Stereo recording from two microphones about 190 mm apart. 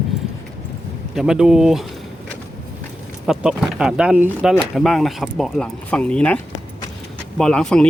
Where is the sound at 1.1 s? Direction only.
5° right (ahead or behind).